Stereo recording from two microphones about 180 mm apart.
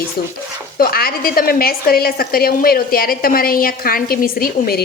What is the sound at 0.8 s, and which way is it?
A woman's voice, 55° left (ahead or behind).